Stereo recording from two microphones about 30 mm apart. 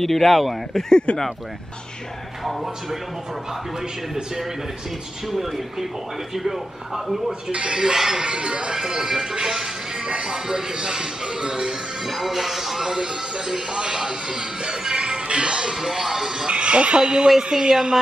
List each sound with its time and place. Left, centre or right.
0.0 s speech: centre
0.7 s speech: left
2.4 s speech: centre
5.2 s speech: centre
7.5 s speech: right
7.9 s speech: centre
8.2 s speech: right
8.7 s speech: centre
10.0 s speech: right
12.1 s speech: centre; by 15.7 s right
15.7 s speech: centre
16.4 s speech: right